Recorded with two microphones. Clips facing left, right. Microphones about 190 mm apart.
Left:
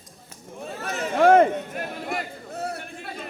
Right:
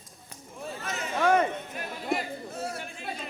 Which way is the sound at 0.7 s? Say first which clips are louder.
Left 5 dB; 60° left (ahead or behind).